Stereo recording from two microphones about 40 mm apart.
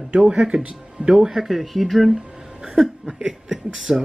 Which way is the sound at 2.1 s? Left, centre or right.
Centre.